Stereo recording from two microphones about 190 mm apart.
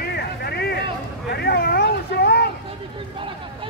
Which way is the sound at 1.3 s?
55° left (ahead or behind).